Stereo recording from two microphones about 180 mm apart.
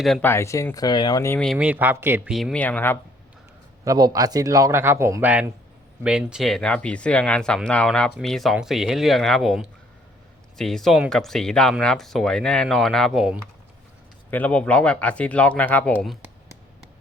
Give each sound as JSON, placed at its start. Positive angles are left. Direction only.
{"t": 0.0, "sound": "speech", "side_deg": 0}
{"t": 0.3, "sound": "speech", "side_deg": 15}
{"t": 1.4, "sound": "speech", "side_deg": 0}
{"t": 3.8, "sound": "speech", "side_deg": -20}